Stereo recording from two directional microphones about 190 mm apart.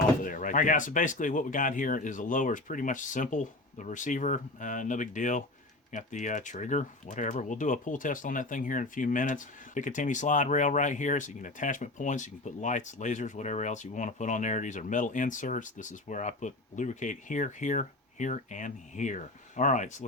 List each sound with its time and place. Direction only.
0.2 s speech: 45° left (ahead or behind)